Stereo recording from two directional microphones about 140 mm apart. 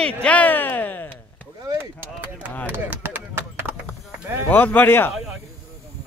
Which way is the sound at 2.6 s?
15° right (ahead or behind).